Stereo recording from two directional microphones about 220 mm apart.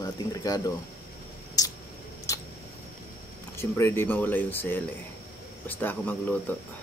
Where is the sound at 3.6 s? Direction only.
10° left (ahead or behind).